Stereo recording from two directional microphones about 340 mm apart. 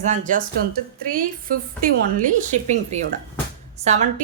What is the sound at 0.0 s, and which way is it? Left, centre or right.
A woman's voice, right.